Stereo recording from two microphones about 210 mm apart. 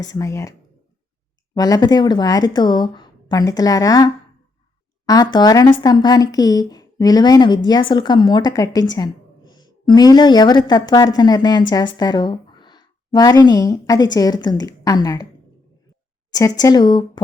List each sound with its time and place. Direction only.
0.0 s speech: 15° left (ahead or behind)
1.5 s a woman's voice: 20° left (ahead or behind)
16.3 s speech: 15° left (ahead or behind)